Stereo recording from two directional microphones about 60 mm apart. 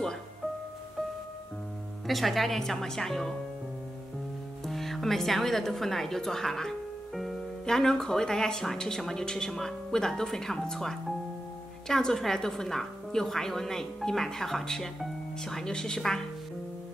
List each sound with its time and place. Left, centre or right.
2.0 s speech: centre
4.6 s a woman's voice: centre